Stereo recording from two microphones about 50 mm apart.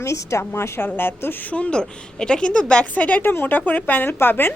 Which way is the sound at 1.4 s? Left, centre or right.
Left.